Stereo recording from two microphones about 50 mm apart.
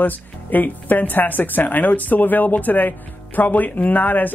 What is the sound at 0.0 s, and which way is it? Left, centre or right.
Speech, left.